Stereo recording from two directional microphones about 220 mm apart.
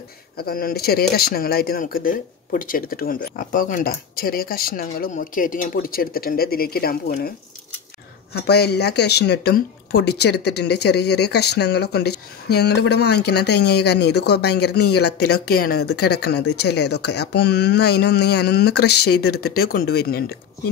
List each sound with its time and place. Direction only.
0.4 s speech: 40° left (ahead or behind)